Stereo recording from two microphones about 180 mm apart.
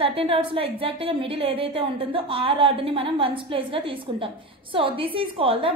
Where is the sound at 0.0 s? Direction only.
30° right (ahead or behind).